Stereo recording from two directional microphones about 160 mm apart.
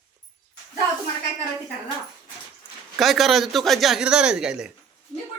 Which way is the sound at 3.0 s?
Centre (ahead or behind).